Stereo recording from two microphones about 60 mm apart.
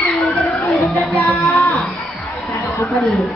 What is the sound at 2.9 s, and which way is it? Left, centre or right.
Speech, centre.